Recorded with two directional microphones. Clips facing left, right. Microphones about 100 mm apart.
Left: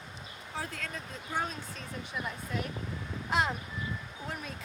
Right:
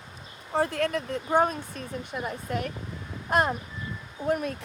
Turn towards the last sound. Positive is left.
turn(degrees=-55)  # may be behind; listen again after turning